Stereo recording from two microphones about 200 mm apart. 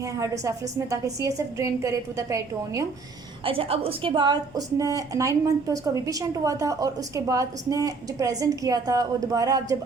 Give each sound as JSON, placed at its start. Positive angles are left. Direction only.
{"t": 0.0, "sound": "a woman's voice", "side_deg": -15}
{"t": 3.4, "sound": "a woman's voice", "side_deg": -30}